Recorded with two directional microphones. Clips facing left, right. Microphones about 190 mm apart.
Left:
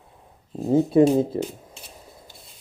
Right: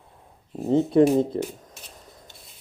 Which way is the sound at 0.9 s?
5° left (ahead or behind).